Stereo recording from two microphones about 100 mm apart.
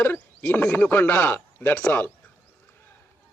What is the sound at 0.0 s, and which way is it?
Speech, 15° left (ahead or behind).